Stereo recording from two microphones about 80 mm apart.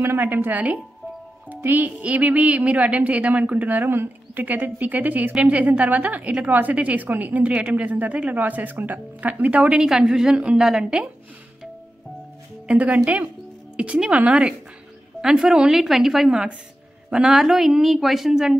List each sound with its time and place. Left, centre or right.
0.0 s a woman's voice: right; by 11.1 s centre
12.6 s a woman's voice: centre